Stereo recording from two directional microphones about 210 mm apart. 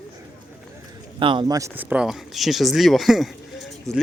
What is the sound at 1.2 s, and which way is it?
Speech, 25° right (ahead or behind).